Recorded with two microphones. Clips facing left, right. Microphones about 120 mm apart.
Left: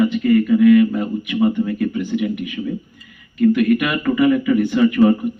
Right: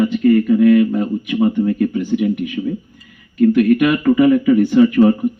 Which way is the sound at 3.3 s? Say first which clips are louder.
Right 3 dB; 40° right (ahead or behind).